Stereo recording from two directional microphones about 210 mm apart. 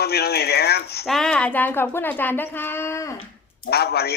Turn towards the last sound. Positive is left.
turn(degrees=50)  # may be behind; listen again after turning